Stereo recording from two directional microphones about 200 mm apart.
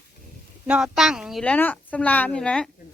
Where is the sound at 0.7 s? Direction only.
5° right (ahead or behind).